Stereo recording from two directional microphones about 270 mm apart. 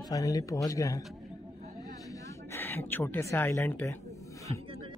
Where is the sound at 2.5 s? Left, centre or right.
Centre.